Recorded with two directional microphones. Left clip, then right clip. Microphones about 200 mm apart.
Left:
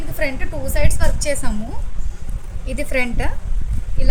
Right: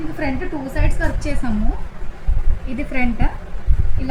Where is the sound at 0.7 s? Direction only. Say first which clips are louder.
Left 5 dB; 70° left (ahead or behind).